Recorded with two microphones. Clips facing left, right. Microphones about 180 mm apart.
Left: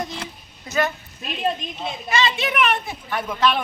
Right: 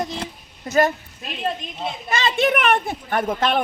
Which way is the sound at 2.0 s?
55° right (ahead or behind).